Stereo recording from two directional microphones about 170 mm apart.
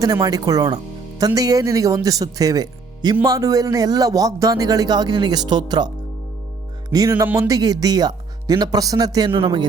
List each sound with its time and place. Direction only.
0.0 s a man's voice: 20° right (ahead or behind)
6.9 s a man's voice: 20° right (ahead or behind)